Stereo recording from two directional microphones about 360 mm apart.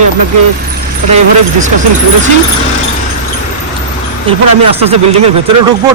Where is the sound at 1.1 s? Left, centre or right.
Centre.